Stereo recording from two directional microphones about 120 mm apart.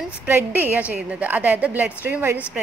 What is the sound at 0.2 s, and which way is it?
A woman's voice, 15° right (ahead or behind).